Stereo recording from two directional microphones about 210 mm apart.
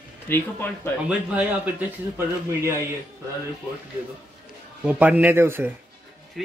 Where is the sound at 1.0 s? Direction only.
5° right (ahead or behind).